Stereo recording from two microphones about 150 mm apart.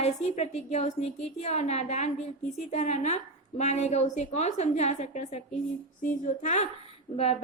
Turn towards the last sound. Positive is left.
turn(degrees=45)  # may be behind; listen again after turning